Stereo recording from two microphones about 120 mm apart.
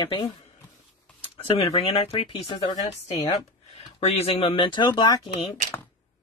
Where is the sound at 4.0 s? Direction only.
60° left (ahead or behind); by 5.2 s 35° left (ahead or behind).